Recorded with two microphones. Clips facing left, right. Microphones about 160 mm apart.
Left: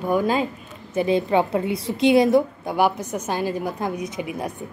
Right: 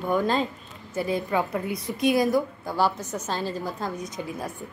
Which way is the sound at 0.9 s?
20° left (ahead or behind).